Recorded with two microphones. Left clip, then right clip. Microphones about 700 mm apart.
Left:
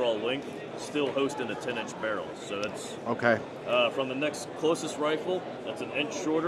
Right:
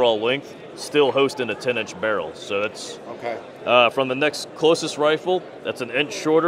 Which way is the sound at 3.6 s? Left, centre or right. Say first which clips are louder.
Right 11 dB; right.